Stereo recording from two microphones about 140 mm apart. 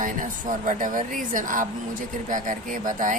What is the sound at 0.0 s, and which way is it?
Speech, 70° right (ahead or behind).